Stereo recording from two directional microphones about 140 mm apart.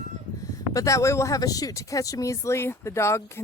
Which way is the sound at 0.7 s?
25° left (ahead or behind).